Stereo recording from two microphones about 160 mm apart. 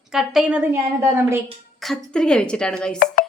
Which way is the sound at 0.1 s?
5° right (ahead or behind).